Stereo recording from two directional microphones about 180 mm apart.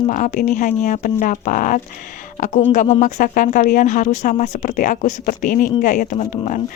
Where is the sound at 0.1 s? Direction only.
45° left (ahead or behind).